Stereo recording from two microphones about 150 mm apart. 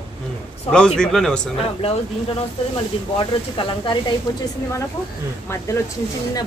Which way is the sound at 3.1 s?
30° left (ahead or behind).